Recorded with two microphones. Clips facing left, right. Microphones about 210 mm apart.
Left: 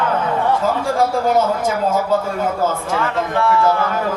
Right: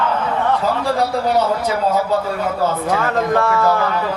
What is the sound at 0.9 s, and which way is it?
A man's voice, 45° left (ahead or behind).